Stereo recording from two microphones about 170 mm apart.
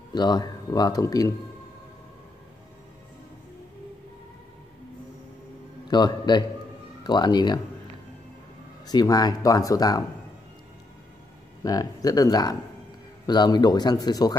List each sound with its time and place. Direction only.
0.1 s speech: 25° left (ahead or behind)
5.9 s speech: 25° left (ahead or behind)
8.8 s speech: 20° left (ahead or behind)
11.6 s speech: 20° left (ahead or behind)